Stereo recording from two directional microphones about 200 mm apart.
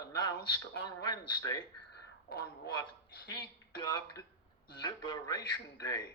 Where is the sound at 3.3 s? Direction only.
25° left (ahead or behind).